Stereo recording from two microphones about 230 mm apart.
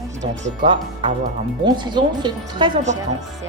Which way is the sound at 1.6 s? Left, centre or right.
Centre.